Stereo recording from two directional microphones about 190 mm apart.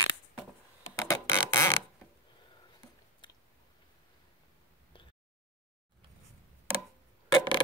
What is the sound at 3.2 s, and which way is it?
Chewing, 25° left (ahead or behind).